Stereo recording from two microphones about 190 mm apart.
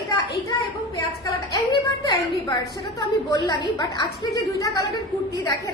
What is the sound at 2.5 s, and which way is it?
A woman's voice, 20° left (ahead or behind).